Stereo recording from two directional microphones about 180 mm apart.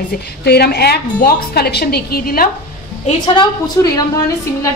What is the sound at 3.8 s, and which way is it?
Speech, 15° left (ahead or behind).